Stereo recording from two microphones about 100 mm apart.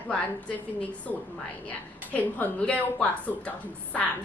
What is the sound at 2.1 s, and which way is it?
Speech, 15° left (ahead or behind).